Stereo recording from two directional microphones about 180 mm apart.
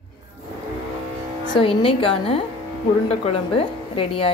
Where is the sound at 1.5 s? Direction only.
30° left (ahead or behind).